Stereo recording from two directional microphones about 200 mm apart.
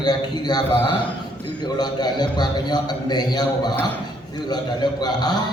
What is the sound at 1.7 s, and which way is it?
A man's voice, 20° left (ahead or behind).